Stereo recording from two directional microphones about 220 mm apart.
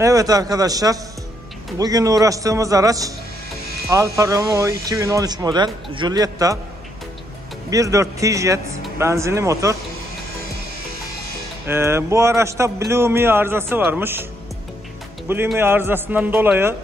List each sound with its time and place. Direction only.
0.0 s speech: 15° right (ahead or behind)
7.7 s speech: 15° right (ahead or behind)
11.6 s speech: 10° right (ahead or behind)
15.2 s speech: 10° right (ahead or behind)